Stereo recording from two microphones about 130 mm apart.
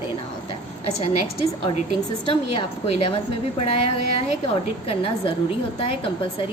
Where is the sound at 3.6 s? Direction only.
50° left (ahead or behind).